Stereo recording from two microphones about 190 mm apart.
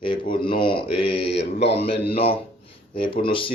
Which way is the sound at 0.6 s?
25° left (ahead or behind).